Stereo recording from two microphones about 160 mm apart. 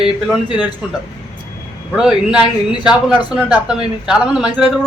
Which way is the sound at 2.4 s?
25° left (ahead or behind).